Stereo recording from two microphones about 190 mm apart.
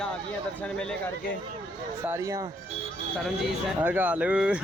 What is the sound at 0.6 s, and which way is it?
Speech, 5° left (ahead or behind).